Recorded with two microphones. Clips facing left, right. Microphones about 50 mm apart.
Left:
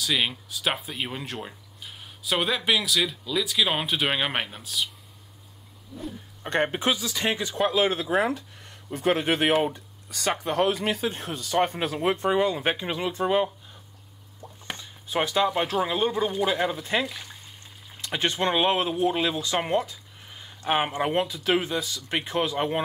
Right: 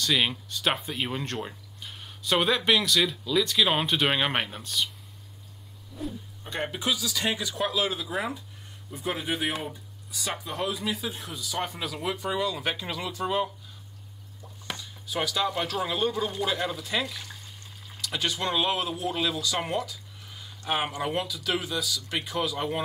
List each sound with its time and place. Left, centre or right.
0.0 s speech: centre
6.4 s speech: left
7.8 s speech: left
17.0 s speech: centre
18.0 s speech: left